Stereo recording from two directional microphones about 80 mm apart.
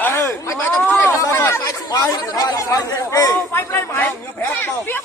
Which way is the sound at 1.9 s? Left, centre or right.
Left.